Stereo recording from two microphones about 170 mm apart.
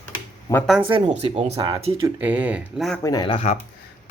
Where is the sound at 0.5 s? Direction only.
20° left (ahead or behind).